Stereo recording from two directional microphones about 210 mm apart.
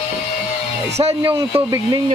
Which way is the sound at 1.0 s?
25° right (ahead or behind).